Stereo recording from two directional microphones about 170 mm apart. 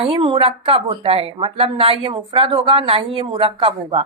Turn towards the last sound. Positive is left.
turn(degrees=-35)  # may be behind; listen again after turning